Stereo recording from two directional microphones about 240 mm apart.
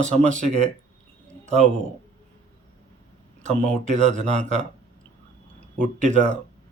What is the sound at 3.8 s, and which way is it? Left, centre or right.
Speech, right.